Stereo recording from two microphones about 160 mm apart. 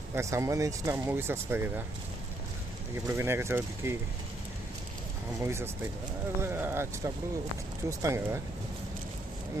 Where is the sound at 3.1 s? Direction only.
15° right (ahead or behind).